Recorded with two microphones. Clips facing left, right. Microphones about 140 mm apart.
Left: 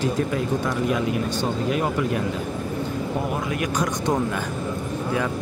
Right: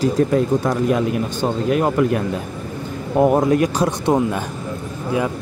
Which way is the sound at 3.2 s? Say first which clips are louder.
Right 11 dB; 45° right (ahead or behind).